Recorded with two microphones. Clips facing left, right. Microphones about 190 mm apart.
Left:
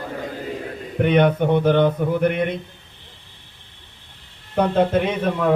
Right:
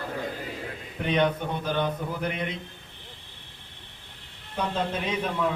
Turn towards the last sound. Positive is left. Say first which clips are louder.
# left 6 dB
turn(degrees=60)  # may be behind; listen again after turning